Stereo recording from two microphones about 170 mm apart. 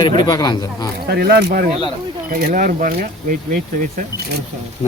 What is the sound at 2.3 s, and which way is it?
Speech, 55° right (ahead or behind).